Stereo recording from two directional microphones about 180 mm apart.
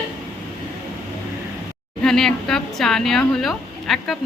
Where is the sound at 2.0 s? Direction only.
5° left (ahead or behind).